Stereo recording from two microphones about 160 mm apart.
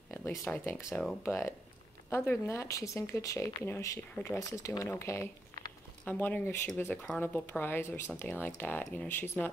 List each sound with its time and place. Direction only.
0.3 s speech: centre (ahead or behind)
0.7 s speech: 20° left (ahead or behind)